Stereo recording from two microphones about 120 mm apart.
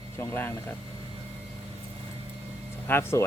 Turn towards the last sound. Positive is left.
turn(degrees=20)  # may be behind; listen again after turning